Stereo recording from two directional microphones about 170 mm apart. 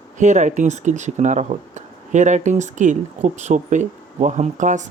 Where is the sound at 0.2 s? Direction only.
45° right (ahead or behind).